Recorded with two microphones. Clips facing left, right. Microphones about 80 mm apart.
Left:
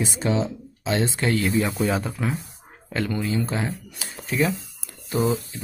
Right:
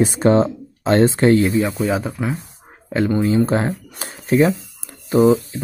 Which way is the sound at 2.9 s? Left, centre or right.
Right.